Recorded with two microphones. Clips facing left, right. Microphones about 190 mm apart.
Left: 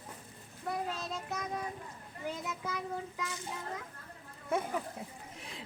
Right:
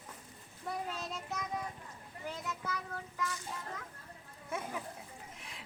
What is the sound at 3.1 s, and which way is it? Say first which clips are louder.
Speech: right 1 dB; 20° left (ahead or behind).